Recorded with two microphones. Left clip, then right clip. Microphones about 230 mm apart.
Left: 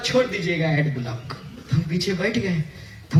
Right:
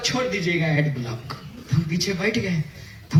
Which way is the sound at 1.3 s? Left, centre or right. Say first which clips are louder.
Even; right.